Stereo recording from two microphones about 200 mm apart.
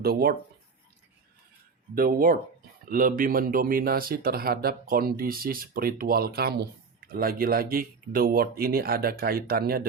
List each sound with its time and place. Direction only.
0.0 s speech: 50° right (ahead or behind)
2.0 s speech: 45° right (ahead or behind)